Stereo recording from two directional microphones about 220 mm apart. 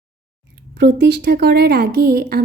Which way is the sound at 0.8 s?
50° right (ahead or behind).